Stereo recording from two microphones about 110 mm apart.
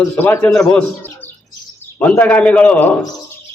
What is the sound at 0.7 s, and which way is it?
A man's voice, 10° left (ahead or behind).